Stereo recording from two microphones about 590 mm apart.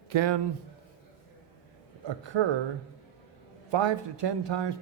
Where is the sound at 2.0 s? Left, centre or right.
Right.